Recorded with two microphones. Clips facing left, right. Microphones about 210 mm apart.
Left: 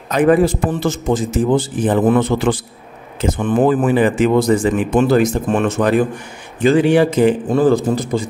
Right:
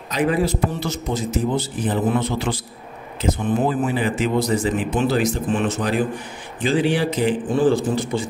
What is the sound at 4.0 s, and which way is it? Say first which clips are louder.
Speech: left 7 dB; 50° left (ahead or behind).